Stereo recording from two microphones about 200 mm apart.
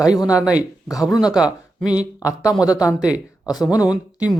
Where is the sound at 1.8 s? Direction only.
20° left (ahead or behind).